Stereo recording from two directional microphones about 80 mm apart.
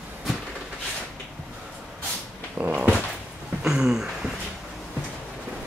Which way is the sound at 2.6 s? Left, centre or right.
Centre.